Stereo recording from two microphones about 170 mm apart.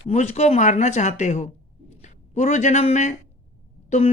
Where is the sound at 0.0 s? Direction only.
40° left (ahead or behind).